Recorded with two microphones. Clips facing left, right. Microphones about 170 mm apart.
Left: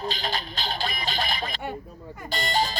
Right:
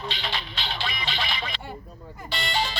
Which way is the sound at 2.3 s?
40° left (ahead or behind).